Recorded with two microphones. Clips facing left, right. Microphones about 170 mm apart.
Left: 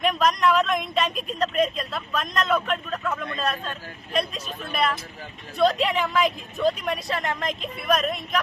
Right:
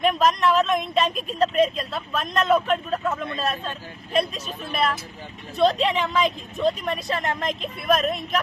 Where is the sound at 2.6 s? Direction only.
30° right (ahead or behind).